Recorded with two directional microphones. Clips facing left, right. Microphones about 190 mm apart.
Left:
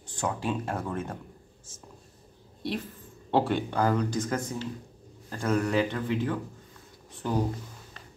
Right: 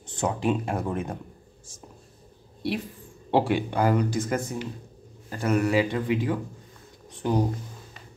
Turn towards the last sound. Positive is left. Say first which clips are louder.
# right 4 dB
turn(degrees=-15)  # may be behind; listen again after turning